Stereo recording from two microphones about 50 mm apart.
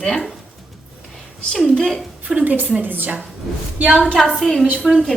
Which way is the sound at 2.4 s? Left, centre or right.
Right.